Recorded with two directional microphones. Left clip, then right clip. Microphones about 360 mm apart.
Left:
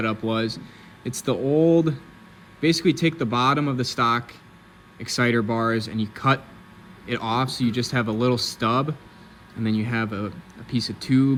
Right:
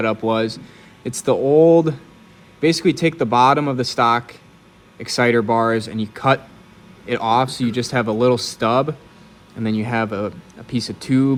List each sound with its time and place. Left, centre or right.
0.0 s speech: centre
1.5 s speech: right
2.6 s speech: centre